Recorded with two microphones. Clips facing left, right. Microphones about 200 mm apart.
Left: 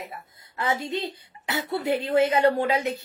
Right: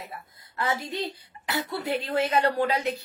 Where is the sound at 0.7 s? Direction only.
20° left (ahead or behind).